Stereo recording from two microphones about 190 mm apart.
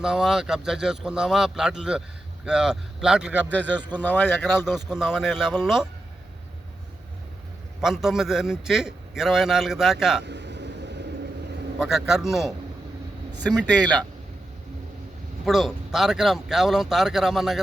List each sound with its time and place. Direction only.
0.0 s a man's voice: 5° right (ahead or behind)
3.5 s a man's voice: 10° left (ahead or behind)
4.6 s a man's voice: 5° right (ahead or behind)
7.8 s a man's voice: centre (ahead or behind)
10.2 s a sound: 65° right (ahead or behind)
11.8 s a man's voice: centre (ahead or behind)
13.7 s a man's voice: 5° left (ahead or behind)
15.4 s a man's voice: centre (ahead or behind)